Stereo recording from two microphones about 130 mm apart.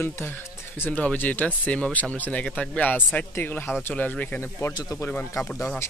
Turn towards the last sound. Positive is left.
turn(degrees=15)  # may be behind; listen again after turning